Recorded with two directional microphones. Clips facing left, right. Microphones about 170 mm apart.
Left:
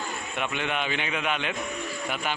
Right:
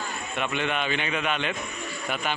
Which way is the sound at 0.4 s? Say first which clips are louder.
Right 2 dB; 10° left (ahead or behind).